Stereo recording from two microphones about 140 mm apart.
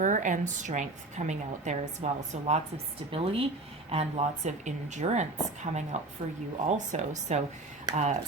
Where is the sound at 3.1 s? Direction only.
40° right (ahead or behind).